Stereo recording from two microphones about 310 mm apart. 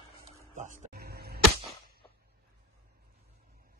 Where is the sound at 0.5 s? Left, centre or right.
Right.